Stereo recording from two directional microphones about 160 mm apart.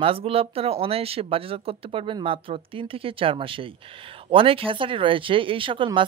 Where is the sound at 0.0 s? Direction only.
35° right (ahead or behind).